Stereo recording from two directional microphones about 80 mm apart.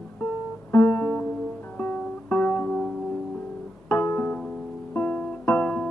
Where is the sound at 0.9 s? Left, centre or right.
Centre.